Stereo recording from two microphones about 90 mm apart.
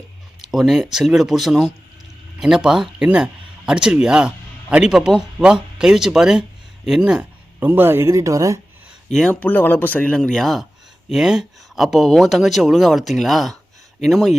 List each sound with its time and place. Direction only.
0.5 s a man's voice: centre (ahead or behind)
7.7 s speech: 25° right (ahead or behind)
9.1 s speech: 10° left (ahead or behind)
10.0 s speech: 10° left (ahead or behind)